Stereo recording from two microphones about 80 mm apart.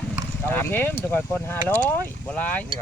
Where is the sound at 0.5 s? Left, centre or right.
Left.